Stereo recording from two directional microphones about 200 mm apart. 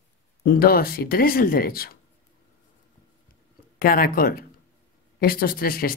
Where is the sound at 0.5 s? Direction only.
45° left (ahead or behind).